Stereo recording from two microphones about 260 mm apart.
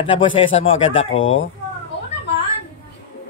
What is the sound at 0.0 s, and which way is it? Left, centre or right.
Speech, centre.